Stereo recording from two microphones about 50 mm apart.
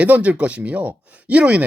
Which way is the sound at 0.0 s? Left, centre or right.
Right.